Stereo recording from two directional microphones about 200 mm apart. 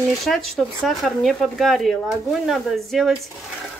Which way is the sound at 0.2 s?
Centre (ahead or behind).